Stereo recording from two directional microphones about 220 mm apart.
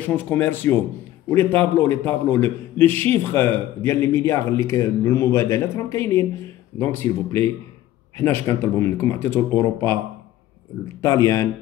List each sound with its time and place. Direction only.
0.0 s speech: 10° left (ahead or behind)
11.0 s speech: 15° left (ahead or behind)